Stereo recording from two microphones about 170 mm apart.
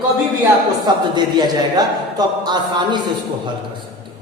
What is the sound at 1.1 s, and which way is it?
A woman's voice, 25° right (ahead or behind).